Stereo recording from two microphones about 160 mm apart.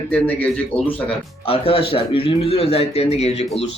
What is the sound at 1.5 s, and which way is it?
Speech, 35° left (ahead or behind).